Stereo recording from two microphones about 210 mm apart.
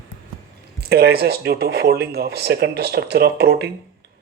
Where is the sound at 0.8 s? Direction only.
50° right (ahead or behind).